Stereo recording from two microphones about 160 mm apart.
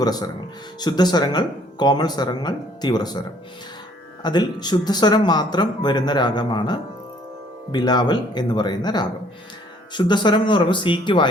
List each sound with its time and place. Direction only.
0.0 s speech: 25° left (ahead or behind)
4.2 s speech: 25° left (ahead or behind)